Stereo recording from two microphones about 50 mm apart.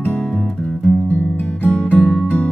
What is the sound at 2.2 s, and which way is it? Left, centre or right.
Music, left.